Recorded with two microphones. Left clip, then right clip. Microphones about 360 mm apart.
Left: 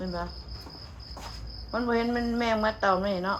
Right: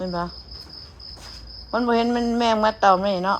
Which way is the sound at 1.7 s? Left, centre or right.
Centre.